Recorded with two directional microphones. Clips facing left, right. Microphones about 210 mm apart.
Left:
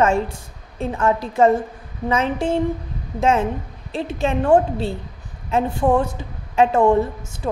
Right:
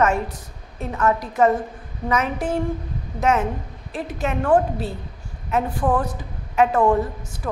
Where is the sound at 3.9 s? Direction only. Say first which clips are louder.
Left 4 dB; 25° left (ahead or behind).